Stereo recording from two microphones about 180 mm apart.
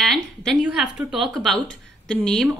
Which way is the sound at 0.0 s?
5° left (ahead or behind).